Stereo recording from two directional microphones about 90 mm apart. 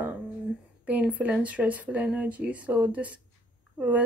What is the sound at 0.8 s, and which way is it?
Speech, 15° right (ahead or behind).